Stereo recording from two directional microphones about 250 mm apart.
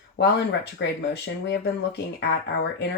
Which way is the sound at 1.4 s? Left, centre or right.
Left.